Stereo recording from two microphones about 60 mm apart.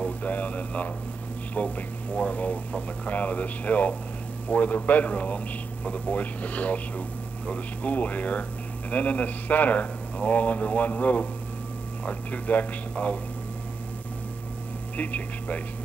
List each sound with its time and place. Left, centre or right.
0.0 s a sound: left
1.5 s speech: left
15.0 s speech: left